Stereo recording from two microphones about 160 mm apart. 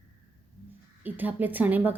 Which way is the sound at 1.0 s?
10° right (ahead or behind).